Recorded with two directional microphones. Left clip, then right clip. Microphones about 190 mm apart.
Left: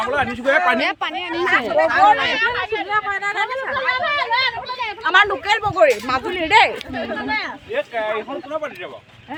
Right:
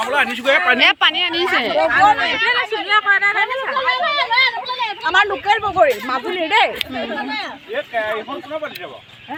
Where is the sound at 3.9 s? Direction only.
55° right (ahead or behind).